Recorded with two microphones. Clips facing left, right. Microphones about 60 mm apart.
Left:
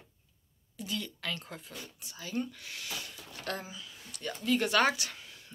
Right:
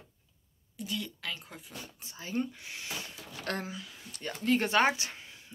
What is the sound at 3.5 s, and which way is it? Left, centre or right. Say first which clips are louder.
Speech: right 3 dB; right.